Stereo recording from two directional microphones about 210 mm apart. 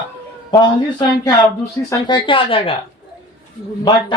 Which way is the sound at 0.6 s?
20° left (ahead or behind).